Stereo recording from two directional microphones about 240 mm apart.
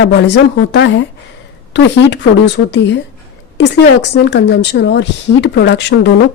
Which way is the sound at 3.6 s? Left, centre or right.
Left.